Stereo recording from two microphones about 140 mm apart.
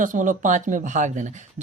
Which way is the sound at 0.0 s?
65° right (ahead or behind).